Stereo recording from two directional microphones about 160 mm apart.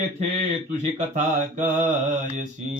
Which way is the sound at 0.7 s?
50° right (ahead or behind).